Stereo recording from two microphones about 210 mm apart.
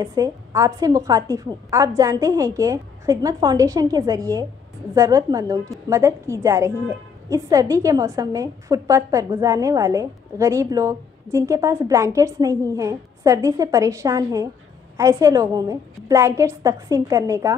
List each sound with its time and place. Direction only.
0.0 s a woman's voice: 15° right (ahead or behind)